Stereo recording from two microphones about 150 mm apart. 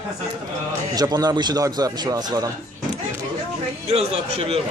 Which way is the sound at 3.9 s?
40° right (ahead or behind).